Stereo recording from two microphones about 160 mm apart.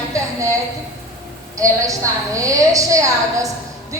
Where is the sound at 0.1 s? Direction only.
20° right (ahead or behind).